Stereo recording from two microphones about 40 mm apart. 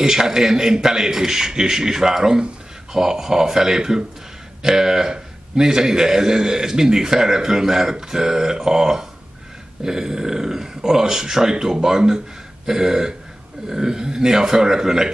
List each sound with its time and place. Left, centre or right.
0.0 s a man's voice: centre